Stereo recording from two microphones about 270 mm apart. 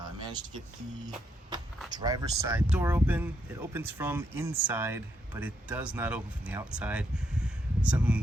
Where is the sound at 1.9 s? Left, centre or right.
Centre.